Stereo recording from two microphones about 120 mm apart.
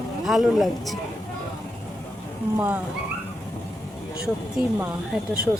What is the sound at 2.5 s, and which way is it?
Speech, 15° right (ahead or behind).